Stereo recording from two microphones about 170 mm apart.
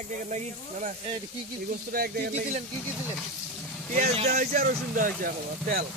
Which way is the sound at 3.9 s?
40° right (ahead or behind).